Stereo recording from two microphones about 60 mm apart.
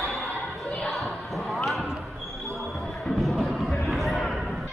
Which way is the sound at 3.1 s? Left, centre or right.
Centre.